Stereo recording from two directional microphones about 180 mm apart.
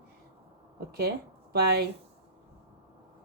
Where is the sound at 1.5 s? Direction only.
65° right (ahead or behind).